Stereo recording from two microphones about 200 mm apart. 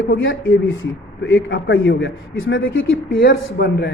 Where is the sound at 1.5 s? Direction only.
65° left (ahead or behind).